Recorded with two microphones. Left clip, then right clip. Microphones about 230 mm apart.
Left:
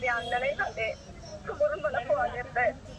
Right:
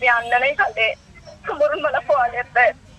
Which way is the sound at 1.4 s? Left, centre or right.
Right.